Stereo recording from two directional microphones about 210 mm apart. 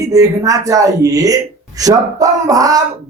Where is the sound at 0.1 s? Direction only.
15° right (ahead or behind).